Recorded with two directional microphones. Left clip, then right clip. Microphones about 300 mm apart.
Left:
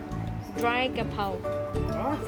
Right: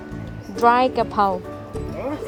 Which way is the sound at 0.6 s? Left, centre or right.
Centre.